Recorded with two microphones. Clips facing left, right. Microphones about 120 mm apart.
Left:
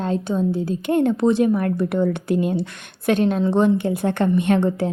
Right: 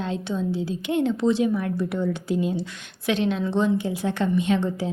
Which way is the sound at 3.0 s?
50° left (ahead or behind).